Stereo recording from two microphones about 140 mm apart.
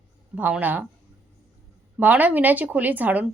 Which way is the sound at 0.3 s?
10° right (ahead or behind).